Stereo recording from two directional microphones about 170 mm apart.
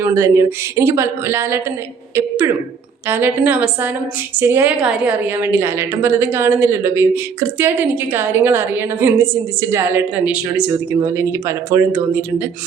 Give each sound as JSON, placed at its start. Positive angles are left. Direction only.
{"t": 0.0, "sound": "a woman's voice", "side_deg": -15}
{"t": 3.1, "sound": "a woman's voice", "side_deg": -10}